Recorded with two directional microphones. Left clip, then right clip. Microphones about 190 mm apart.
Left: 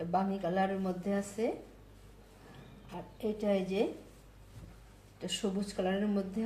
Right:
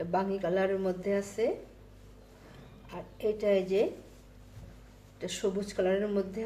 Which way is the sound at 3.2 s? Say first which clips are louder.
Right 5 dB; 30° right (ahead or behind).